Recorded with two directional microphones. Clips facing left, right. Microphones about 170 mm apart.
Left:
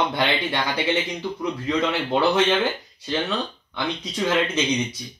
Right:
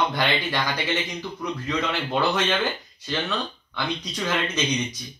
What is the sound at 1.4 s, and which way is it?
Speech, 25° left (ahead or behind).